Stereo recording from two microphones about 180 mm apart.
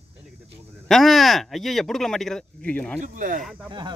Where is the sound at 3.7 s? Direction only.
25° right (ahead or behind).